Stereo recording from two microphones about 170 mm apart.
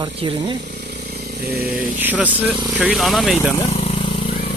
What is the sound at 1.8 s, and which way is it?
Speech, 10° right (ahead or behind).